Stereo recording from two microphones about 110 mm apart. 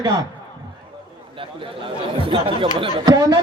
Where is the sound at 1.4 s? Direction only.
50° right (ahead or behind).